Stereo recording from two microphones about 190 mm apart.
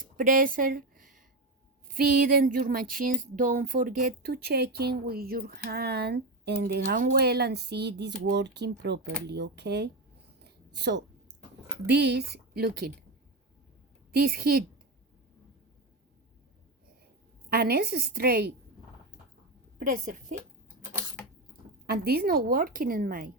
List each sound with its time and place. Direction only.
0.0 s a sound: 45° right (ahead or behind)
1.9 s speech: 50° right (ahead or behind)
10.4 s a sound: 65° right (ahead or behind)
11.9 s speech: 60° right (ahead or behind)
14.1 s a woman's voice: 50° right (ahead or behind)
17.5 s speech: 55° right (ahead or behind)
19.8 s a woman's voice: 50° right (ahead or behind)
21.8 s a woman's voice: 55° right (ahead or behind)